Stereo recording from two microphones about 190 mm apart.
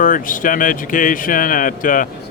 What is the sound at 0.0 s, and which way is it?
Speech, 45° left (ahead or behind).